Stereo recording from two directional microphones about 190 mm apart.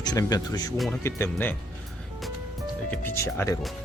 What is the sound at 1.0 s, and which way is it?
Speech, 10° left (ahead or behind).